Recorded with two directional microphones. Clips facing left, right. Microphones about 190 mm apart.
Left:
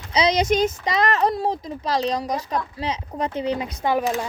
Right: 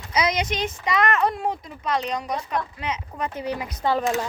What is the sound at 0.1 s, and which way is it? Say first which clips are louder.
A child's voice: left 5 dB; 35° left (ahead or behind).